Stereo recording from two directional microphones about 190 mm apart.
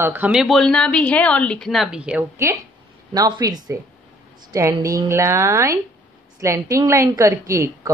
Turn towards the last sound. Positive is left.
turn(degrees=-15)  # may be behind; listen again after turning